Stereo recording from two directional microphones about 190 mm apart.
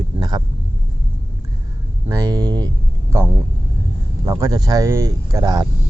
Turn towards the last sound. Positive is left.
turn(degrees=-20)  # may be behind; listen again after turning